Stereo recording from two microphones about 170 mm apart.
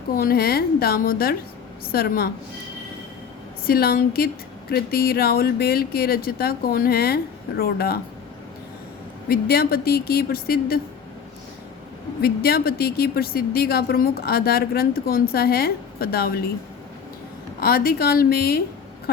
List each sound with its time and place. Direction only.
0.1 s a woman's voice: 60° left (ahead or behind)
3.7 s a woman's voice: 65° left (ahead or behind)
9.3 s a woman's voice: 65° left (ahead or behind)
12.2 s a woman's voice: 65° left (ahead or behind)
17.6 s a woman's voice: 65° left (ahead or behind)